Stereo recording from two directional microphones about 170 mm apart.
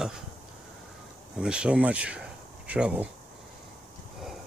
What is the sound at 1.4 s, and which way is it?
Speech, 5° right (ahead or behind).